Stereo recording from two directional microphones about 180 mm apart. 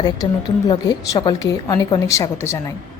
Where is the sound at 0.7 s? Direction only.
20° left (ahead or behind).